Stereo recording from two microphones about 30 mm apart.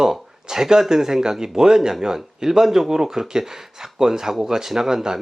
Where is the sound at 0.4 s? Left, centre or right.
Centre.